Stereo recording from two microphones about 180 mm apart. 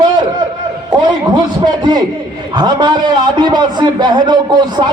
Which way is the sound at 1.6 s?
25° right (ahead or behind).